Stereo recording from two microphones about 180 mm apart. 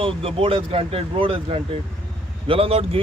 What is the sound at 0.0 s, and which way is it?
A man's voice, 30° right (ahead or behind).